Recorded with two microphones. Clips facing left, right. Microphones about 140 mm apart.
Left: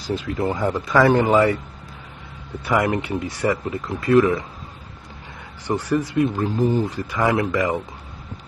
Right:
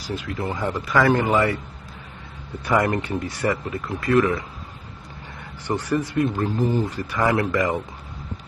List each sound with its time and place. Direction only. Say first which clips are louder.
0.1 s speech: left 5 dB; 30° left (ahead or behind)
0.6 s a man's voice: left 2 dB; 5° left (ahead or behind)
2.7 s a man's voice: even; centre (ahead or behind)
3.0 s speech: left 2 dB; 15° left (ahead or behind)
5.7 s speech: left 2 dB; 10° left (ahead or behind)
7.5 s a man's voice: left 1 dB; centre (ahead or behind)